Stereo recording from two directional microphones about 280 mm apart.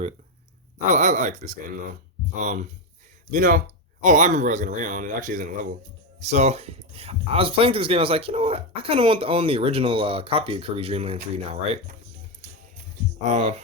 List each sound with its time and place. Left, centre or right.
0.9 s speech: right
13.3 s speech: right